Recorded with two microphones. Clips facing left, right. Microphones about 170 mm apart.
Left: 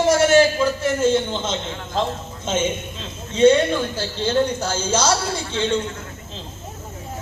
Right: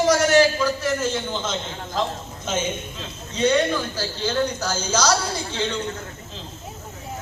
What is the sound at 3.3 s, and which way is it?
A man's voice, 25° left (ahead or behind).